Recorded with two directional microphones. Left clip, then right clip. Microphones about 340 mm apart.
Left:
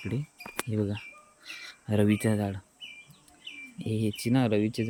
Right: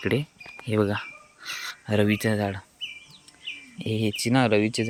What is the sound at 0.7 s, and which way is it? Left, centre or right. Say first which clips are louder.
Speech: right 11 dB; centre.